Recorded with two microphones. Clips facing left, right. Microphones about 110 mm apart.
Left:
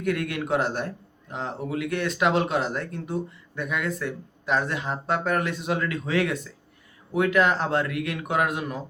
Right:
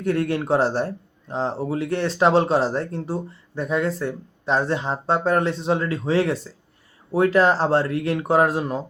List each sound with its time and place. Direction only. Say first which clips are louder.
0.0 s speech: right 5 dB; 30° right (ahead or behind)